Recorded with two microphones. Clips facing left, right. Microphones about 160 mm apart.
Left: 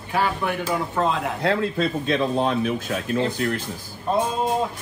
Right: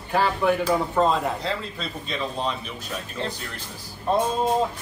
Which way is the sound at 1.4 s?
60° left (ahead or behind).